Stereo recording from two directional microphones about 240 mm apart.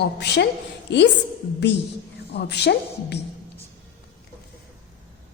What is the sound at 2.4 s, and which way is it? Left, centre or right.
Speech, left.